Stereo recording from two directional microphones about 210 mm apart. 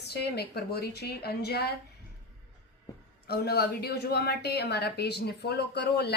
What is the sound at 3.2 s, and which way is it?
A woman's voice, 50° left (ahead or behind).